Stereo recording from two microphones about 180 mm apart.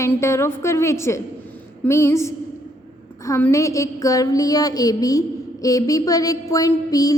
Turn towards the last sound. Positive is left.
turn(degrees=20)  # may be behind; listen again after turning